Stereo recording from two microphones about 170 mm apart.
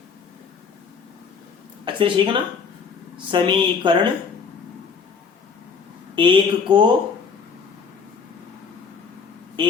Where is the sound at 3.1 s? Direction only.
30° right (ahead or behind).